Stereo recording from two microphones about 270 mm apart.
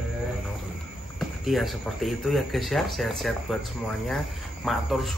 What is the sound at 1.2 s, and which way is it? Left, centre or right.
Speech, centre.